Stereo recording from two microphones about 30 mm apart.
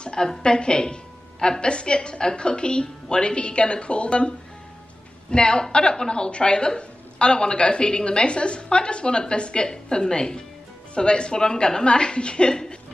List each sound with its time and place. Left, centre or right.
0.0 s music: left
0.3 s a woman's voice: left